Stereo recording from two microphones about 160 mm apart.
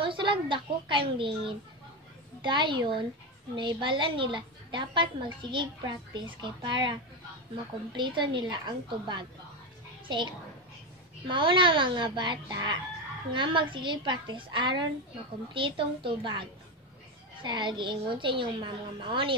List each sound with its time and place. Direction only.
0.0 s a woman's voice: 30° right (ahead or behind)